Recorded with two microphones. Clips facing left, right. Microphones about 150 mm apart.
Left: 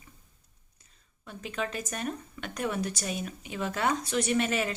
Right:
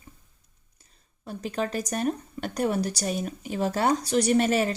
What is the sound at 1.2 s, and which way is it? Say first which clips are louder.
Speech: right 5 dB; 35° right (ahead or behind).